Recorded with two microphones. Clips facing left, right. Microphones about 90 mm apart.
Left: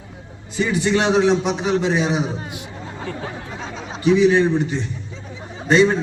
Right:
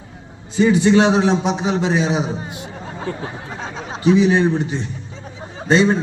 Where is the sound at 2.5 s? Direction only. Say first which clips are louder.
Right 2 dB; 30° right (ahead or behind).